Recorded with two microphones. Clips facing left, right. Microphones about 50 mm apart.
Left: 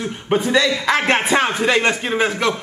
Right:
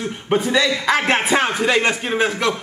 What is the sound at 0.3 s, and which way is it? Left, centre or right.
A man's voice, centre.